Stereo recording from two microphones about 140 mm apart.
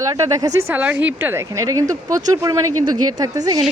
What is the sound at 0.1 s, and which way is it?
Speech, 25° right (ahead or behind).